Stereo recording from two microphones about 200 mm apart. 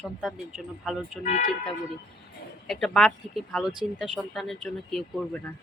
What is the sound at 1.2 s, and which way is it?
Speech, 40° left (ahead or behind).